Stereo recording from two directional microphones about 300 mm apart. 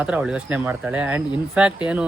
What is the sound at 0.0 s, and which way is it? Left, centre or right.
Speech, centre.